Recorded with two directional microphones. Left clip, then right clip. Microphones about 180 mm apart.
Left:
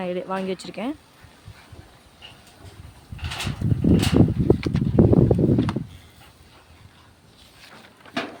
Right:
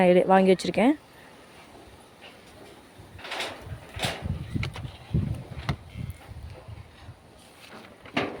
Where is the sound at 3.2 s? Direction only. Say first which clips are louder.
Left 1 dB; 65° left (ahead or behind).